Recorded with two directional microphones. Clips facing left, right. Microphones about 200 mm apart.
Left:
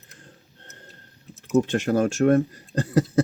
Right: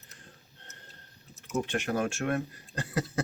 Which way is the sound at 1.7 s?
40° left (ahead or behind).